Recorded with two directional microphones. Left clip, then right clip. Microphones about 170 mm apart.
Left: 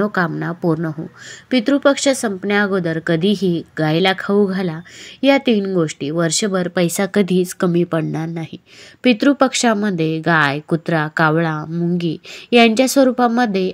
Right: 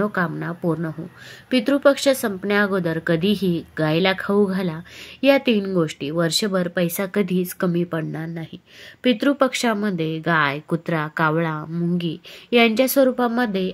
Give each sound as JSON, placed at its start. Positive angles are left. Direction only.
{"t": 0.0, "sound": "speech", "side_deg": 20}
{"t": 6.7, "sound": "speech", "side_deg": 25}